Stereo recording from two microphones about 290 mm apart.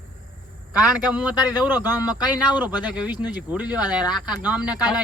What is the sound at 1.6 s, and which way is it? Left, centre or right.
Speech, centre.